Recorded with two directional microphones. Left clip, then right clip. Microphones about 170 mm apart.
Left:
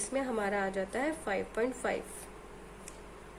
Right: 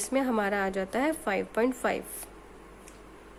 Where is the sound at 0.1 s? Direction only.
50° right (ahead or behind).